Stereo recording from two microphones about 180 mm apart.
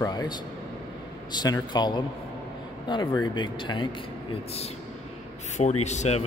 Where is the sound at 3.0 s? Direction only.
20° left (ahead or behind).